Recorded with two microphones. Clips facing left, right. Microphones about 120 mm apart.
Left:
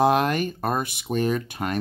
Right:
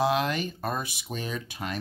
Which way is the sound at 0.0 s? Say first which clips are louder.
Left 5 dB; 50° left (ahead or behind).